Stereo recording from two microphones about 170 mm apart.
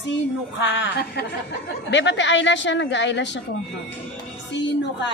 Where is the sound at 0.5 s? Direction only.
90° left.